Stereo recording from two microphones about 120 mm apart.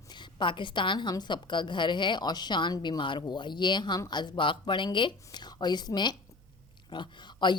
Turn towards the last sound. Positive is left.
turn(degrees=40)  # may be behind; listen again after turning